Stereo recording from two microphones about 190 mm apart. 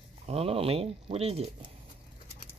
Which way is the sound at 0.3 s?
30° right (ahead or behind).